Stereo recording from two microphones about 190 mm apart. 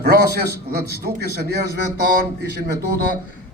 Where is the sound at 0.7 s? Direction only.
55° right (ahead or behind).